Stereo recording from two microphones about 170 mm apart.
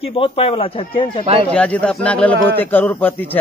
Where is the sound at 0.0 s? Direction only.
35° left (ahead or behind).